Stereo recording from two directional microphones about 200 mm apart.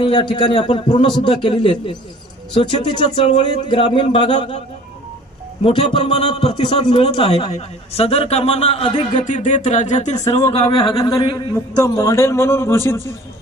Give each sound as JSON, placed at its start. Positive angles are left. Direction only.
{"t": 0.0, "sound": "speech", "side_deg": 25}
{"t": 5.6, "sound": "speech", "side_deg": 30}
{"t": 9.2, "sound": "speech", "side_deg": 40}